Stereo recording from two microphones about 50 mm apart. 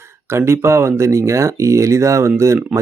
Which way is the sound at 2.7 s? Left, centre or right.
Right.